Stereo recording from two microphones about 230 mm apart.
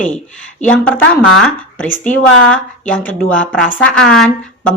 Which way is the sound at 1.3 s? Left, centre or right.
Centre.